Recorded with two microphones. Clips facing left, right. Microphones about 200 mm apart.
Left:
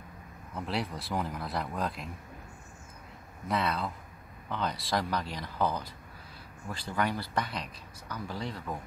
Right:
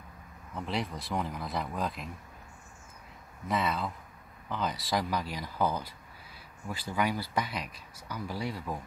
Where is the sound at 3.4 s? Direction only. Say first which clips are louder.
Even; centre (ahead or behind).